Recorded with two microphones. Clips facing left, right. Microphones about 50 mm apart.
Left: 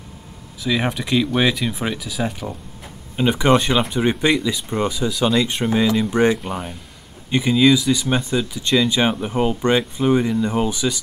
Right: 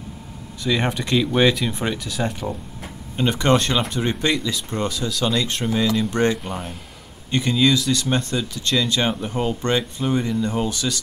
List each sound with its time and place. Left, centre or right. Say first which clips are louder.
0.7 s speech: left 1 dB; centre